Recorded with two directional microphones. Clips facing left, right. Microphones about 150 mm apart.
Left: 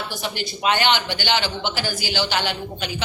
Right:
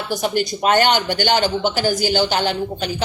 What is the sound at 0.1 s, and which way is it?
Speech, 45° right (ahead or behind).